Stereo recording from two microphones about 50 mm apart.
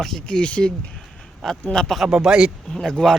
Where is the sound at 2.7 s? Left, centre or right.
Centre.